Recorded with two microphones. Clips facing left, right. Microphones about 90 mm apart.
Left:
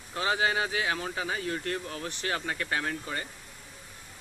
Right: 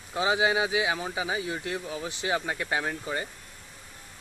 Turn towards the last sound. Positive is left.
turn(degrees=-15)  # may be behind; listen again after turning